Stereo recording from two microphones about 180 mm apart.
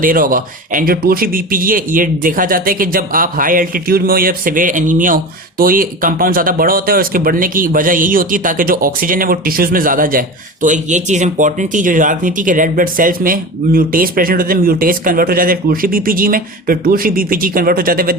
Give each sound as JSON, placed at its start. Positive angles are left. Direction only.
{"t": 0.0, "sound": "speech", "side_deg": -50}